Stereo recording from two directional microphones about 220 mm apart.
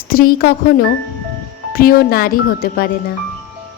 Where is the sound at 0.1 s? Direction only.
40° left (ahead or behind).